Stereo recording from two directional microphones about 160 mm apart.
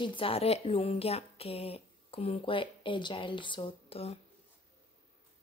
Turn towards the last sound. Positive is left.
turn(degrees=40)  # may be behind; listen again after turning